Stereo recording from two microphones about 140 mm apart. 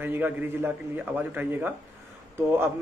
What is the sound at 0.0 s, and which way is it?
Speech, 15° right (ahead or behind).